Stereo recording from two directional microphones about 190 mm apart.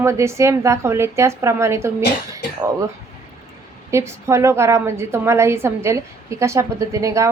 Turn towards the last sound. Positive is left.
turn(degrees=-15)  # may be behind; listen again after turning